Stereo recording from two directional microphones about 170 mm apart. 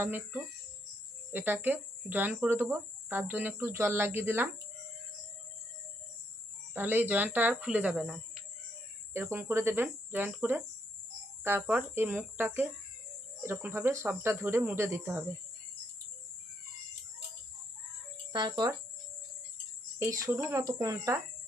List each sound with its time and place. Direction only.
0.0 s speech: 10° right (ahead or behind)
6.7 s speech: 10° right (ahead or behind)
18.3 s speech: 25° right (ahead or behind)
20.0 s speech: 15° right (ahead or behind)